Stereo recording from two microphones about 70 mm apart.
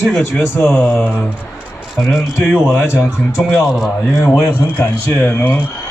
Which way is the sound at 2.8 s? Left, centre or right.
Left.